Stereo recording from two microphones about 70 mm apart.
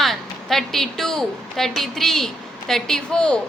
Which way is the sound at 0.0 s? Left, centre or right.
Centre.